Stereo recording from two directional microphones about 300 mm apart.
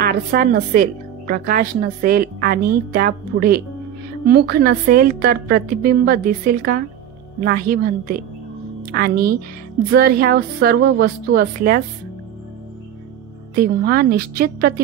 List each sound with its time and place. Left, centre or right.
0.0 s a woman's voice: right
13.6 s a woman's voice: right